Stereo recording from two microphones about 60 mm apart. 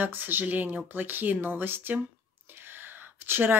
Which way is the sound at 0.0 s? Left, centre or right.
Right.